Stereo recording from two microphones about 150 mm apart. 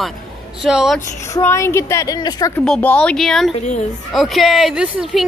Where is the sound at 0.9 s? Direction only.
15° left (ahead or behind).